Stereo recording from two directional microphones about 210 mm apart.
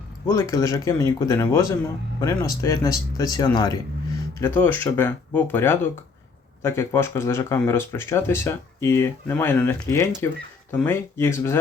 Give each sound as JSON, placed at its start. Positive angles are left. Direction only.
{"t": 0.3, "sound": "speech", "side_deg": 15}